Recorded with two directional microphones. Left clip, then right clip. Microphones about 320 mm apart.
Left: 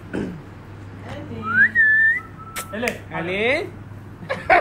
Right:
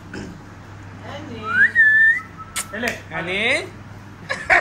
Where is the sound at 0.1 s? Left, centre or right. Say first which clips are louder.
Left 6 dB; centre.